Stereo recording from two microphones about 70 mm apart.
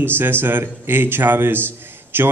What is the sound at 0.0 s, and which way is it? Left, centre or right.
Speech, right.